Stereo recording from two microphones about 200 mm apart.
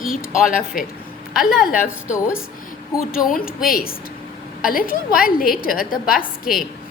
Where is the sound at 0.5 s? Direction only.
45° left (ahead or behind).